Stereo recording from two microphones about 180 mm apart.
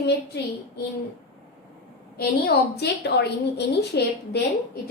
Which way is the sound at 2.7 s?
65° left (ahead or behind).